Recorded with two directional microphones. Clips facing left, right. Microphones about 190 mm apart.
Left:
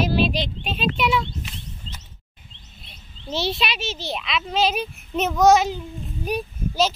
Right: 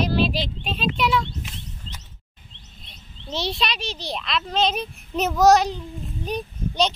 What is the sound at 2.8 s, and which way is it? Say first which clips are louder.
A child's voice: left 3 dB; 5° left (ahead or behind).